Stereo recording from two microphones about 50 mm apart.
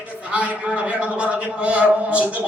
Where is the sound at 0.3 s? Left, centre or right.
Right.